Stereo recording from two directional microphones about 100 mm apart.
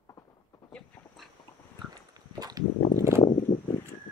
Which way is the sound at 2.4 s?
40° right (ahead or behind).